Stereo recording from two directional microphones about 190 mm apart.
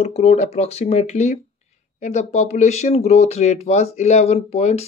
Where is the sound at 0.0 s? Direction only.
30° left (ahead or behind).